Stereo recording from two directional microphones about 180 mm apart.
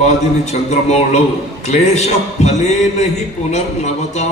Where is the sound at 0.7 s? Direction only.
40° left (ahead or behind).